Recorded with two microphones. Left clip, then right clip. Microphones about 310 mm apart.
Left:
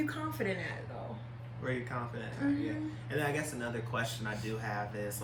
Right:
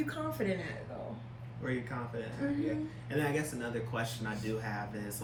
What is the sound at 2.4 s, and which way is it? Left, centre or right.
Speech, centre.